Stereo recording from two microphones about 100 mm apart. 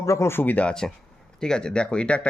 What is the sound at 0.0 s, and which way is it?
Speech, 30° left (ahead or behind).